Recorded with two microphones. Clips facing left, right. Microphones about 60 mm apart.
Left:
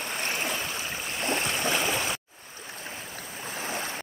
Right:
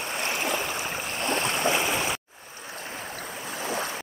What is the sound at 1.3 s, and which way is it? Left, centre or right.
Boat, right.